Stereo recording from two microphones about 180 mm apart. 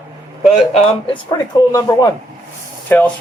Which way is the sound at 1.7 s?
20° left (ahead or behind).